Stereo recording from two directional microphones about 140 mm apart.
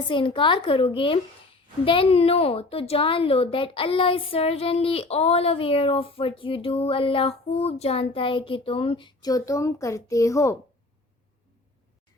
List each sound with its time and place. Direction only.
0.1 s a woman's voice: 35° left (ahead or behind)